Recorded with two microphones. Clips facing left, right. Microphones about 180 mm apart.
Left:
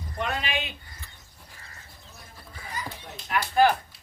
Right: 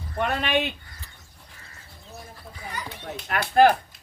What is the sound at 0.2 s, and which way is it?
Speech, 55° right (ahead or behind).